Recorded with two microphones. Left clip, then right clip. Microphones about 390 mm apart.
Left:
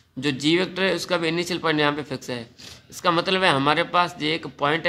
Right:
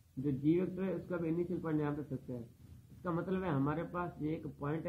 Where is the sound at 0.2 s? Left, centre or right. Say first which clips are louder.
Left 12 dB; left.